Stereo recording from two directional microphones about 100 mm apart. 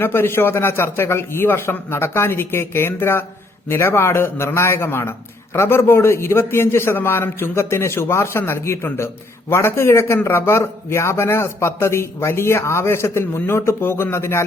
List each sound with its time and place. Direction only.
0.0 s speech: 25° left (ahead or behind)